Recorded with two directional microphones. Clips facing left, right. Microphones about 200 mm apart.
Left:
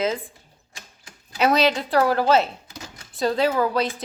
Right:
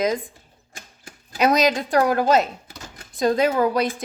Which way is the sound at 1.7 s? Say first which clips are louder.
Right 1 dB; 15° right (ahead or behind).